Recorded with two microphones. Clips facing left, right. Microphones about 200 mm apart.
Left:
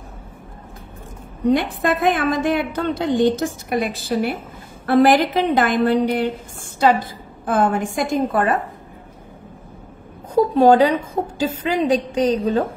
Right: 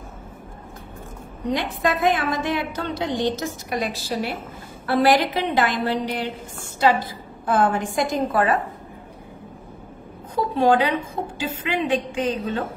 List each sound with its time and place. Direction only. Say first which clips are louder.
1.5 s a woman's voice: left 5 dB; 50° left (ahead or behind)
10.3 s a woman's voice: left 6 dB; 40° left (ahead or behind)